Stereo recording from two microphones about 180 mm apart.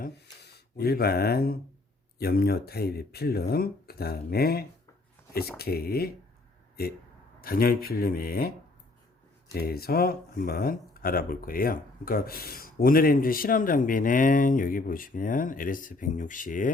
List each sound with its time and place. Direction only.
0.8 s speech: 60° left (ahead or behind)
7.4 s speech: 55° left (ahead or behind)